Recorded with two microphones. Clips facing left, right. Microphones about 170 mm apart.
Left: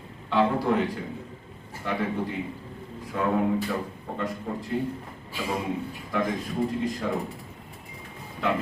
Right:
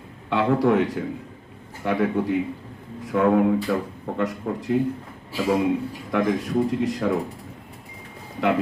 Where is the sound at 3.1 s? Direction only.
65° right (ahead or behind).